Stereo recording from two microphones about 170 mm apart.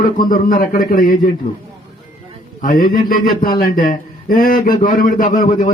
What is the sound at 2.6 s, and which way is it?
A man's voice, 55° left (ahead or behind).